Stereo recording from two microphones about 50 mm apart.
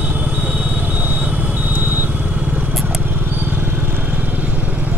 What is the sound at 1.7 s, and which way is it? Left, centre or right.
Vehicle, right.